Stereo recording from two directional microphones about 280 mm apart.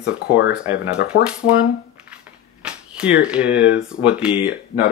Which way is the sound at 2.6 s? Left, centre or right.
Centre.